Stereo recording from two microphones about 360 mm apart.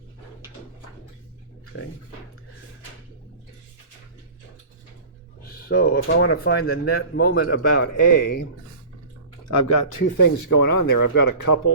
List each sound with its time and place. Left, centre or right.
5.5 s speech: left
7.9 s speech: left
9.5 s speech: left